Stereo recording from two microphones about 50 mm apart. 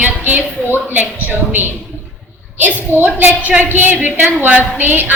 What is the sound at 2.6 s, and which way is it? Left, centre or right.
A woman's voice, right.